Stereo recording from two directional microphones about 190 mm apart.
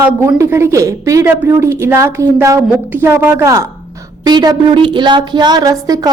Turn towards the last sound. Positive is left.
turn(degrees=-20)  # may be behind; listen again after turning